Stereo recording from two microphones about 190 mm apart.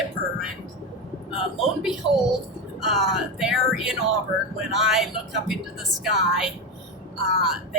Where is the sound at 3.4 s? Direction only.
Centre (ahead or behind).